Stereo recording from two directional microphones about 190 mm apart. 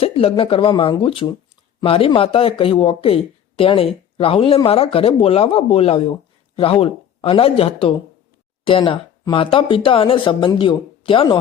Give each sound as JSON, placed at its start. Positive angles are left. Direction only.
{"t": 0.0, "sound": "speech", "side_deg": 30}